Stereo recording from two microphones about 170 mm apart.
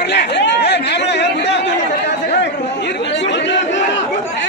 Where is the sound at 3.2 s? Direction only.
90° left.